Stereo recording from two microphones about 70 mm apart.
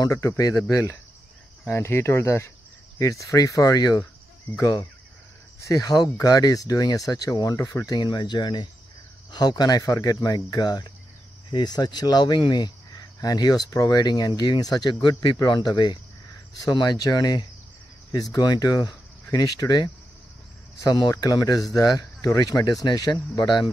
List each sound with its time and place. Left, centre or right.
0.0 s speech: left
1.7 s speech: left
3.0 s speech: left
7.8 s speech: left
13.2 s speech: left
16.6 s speech: left
20.8 s speech: left